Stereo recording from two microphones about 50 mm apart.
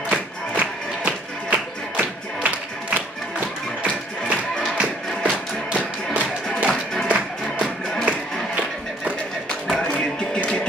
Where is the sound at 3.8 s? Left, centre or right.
Right.